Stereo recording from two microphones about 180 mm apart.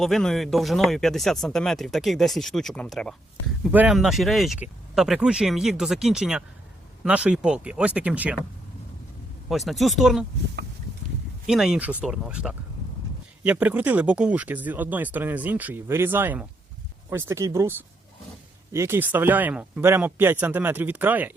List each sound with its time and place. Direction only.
0.0 s speech: centre (ahead or behind)
3.6 s speech: 10° right (ahead or behind)
9.5 s speech: centre (ahead or behind)
11.4 s speech: 5° right (ahead or behind)